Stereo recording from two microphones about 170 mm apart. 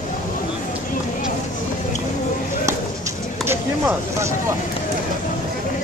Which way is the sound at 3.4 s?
15° right (ahead or behind).